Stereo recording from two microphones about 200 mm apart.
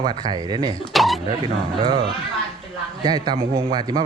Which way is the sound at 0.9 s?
Centre (ahead or behind).